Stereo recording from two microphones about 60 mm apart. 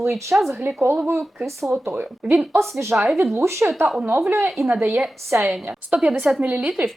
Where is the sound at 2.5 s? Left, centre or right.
Right.